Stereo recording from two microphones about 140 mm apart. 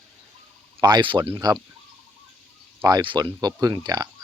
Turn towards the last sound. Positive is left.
turn(degrees=-25)  # may be behind; listen again after turning